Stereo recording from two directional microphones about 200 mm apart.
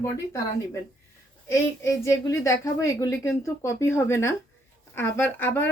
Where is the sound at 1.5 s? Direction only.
15° left (ahead or behind).